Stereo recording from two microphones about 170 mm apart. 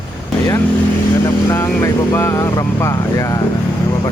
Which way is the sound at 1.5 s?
15° left (ahead or behind).